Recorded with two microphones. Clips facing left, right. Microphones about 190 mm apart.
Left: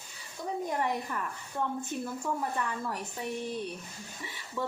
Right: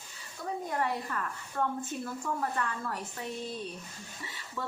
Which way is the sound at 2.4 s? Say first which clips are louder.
Even; 15° left (ahead or behind).